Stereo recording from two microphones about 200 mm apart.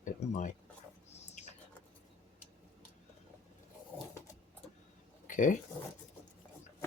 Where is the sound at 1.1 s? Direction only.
35° left (ahead or behind).